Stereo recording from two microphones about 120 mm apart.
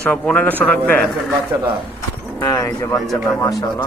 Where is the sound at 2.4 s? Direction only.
30° left (ahead or behind).